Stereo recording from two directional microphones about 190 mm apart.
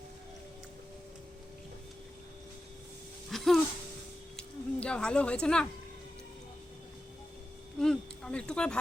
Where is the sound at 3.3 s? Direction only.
Centre (ahead or behind).